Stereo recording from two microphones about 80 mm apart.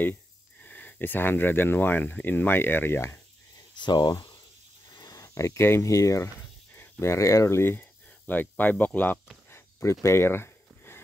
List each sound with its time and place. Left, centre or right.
0.0 s speech: left
3.7 s speech: left
4.9 s speech: left
8.3 s speech: left
9.5 s a sound: left